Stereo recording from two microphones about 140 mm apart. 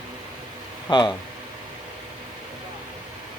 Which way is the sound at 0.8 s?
30° left (ahead or behind).